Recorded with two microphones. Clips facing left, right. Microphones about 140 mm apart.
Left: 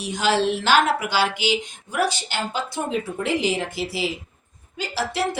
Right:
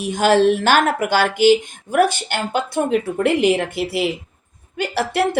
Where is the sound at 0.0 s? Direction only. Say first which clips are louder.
Right 7 dB; 50° right (ahead or behind).